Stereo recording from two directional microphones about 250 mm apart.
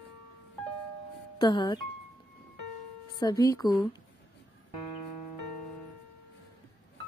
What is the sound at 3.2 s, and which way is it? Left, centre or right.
Speech, centre.